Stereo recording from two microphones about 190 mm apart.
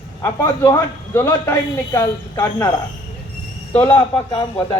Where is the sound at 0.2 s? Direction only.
15° left (ahead or behind).